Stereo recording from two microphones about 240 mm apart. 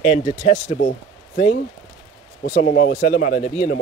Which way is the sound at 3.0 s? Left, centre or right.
Left.